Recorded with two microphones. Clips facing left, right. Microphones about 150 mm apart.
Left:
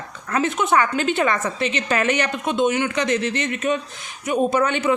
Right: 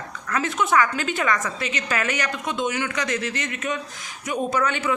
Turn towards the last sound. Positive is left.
turn(degrees=25)  # may be behind; listen again after turning